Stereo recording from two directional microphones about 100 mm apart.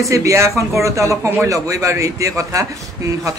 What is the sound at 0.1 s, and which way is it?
A man's voice, 30° right (ahead or behind).